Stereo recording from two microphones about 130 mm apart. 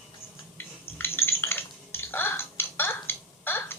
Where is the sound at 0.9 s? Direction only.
15° left (ahead or behind).